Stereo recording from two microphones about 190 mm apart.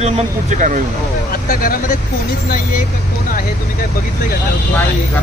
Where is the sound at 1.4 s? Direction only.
50° left (ahead or behind).